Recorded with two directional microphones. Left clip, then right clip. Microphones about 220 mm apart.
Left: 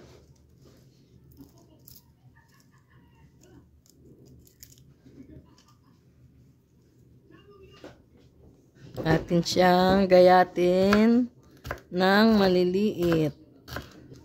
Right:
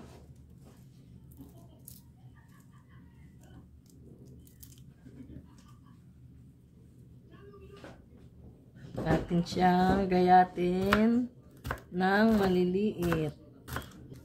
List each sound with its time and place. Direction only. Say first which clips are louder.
9.0 s speech: left 6 dB; 50° left (ahead or behind)